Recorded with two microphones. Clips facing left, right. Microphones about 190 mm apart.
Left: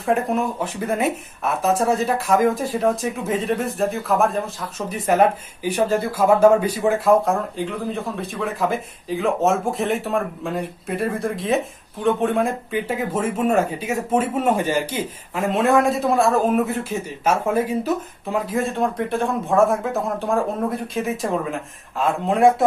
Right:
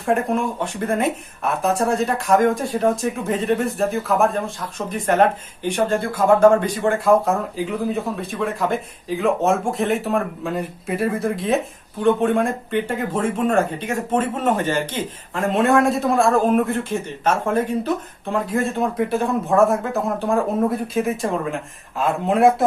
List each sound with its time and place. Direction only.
0.0 s speech: centre (ahead or behind)